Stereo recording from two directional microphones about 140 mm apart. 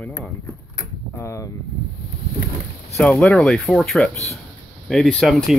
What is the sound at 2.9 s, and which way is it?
Speech, 10° left (ahead or behind).